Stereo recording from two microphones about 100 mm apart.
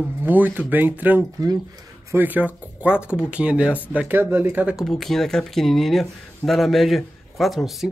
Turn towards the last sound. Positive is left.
turn(degrees=0)  # may be behind; listen again after turning